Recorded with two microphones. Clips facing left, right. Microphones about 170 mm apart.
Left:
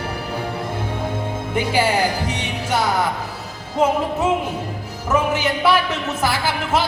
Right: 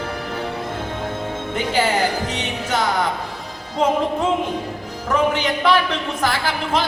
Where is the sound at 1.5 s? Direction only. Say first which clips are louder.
Left 1 dB; 10° left (ahead or behind).